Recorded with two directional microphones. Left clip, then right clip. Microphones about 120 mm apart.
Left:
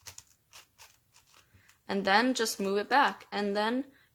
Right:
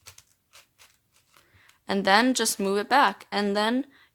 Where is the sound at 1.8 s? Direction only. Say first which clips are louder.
Right 5 dB; 40° right (ahead or behind).